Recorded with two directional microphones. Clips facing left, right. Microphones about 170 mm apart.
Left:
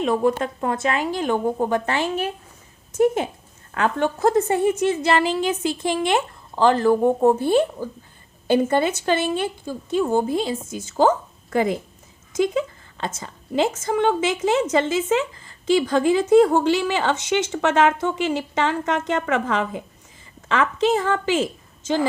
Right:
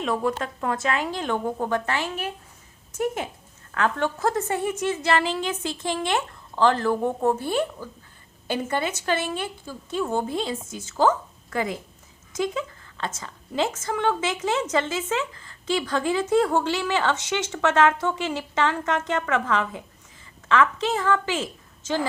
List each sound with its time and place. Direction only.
0.1 s a woman's voice: 25° left (ahead or behind)
0.6 s a woman's voice: 10° left (ahead or behind); by 2.3 s 25° left (ahead or behind)
3.8 s a woman's voice: 15° left (ahead or behind)
10.1 s a woman's voice: 10° left (ahead or behind)
12.4 s a sound: 20° left (ahead or behind)
13.2 s a woman's voice: 20° left (ahead or behind)